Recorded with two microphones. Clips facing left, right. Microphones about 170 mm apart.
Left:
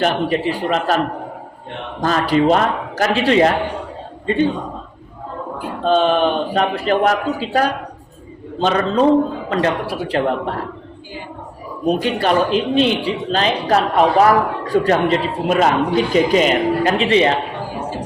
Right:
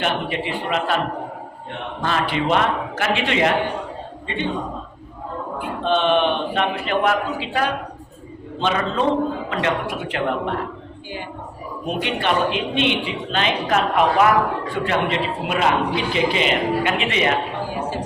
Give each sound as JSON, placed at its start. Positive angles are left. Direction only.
{"t": 0.0, "sound": "a man's voice", "side_deg": 40}
{"t": 2.0, "sound": "a man's voice", "side_deg": 40}
{"t": 5.5, "sound": "a man's voice", "side_deg": 40}
{"t": 11.9, "sound": "a man's voice", "side_deg": 40}